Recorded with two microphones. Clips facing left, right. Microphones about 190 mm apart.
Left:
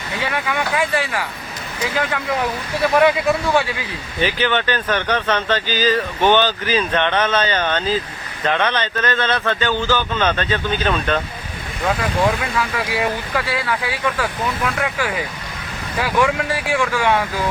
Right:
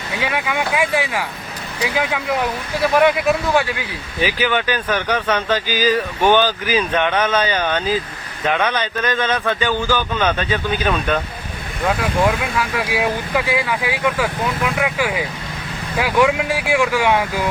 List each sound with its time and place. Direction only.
0.2 s speech: 10° right (ahead or behind)
12.5 s speech: 10° right (ahead or behind)